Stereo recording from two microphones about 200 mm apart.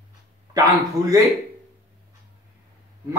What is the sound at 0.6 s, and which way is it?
Speech, 20° right (ahead or behind).